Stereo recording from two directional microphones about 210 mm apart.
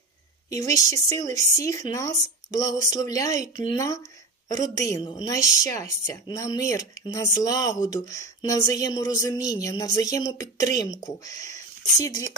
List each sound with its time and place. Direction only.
0.5 s speech: 15° left (ahead or behind)